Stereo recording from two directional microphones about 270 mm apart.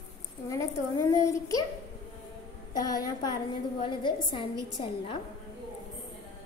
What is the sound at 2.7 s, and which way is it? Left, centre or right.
A woman's voice, centre.